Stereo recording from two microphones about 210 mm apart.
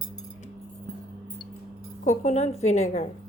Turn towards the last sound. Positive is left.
turn(degrees=35)  # may be behind; listen again after turning